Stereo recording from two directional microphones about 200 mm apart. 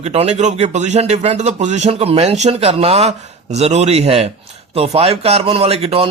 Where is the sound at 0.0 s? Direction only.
35° right (ahead or behind).